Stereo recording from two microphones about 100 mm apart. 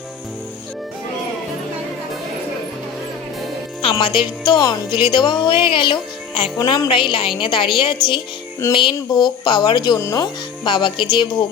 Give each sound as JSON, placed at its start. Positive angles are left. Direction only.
{"t": 3.9, "sound": "a woman's voice", "side_deg": 55}